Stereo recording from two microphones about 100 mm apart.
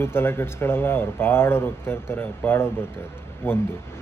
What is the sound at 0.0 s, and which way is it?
Speech, 25° left (ahead or behind).